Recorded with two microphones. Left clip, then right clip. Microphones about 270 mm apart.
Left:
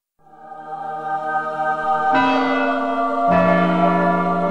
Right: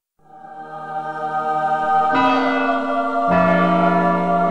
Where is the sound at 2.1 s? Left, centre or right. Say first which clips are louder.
Even; centre.